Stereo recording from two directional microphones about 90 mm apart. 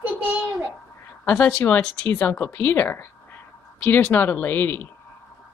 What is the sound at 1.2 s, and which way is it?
Speech, 20° left (ahead or behind).